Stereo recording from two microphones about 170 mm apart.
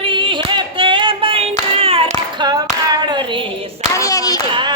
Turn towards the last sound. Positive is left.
turn(degrees=-25)  # may be behind; listen again after turning